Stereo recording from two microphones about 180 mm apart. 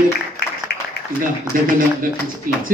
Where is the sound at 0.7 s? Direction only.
65° left (ahead or behind).